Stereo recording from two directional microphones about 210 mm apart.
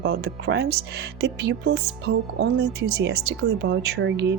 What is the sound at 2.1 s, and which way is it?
Speech, 90° right.